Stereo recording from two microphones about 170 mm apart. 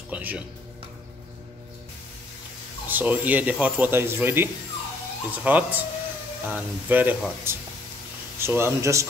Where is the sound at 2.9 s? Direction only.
10° right (ahead or behind).